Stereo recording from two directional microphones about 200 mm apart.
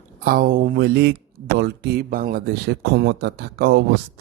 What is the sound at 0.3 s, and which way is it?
Speech, 45° right (ahead or behind).